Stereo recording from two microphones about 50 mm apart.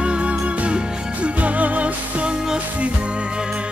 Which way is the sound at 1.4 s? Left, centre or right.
Right.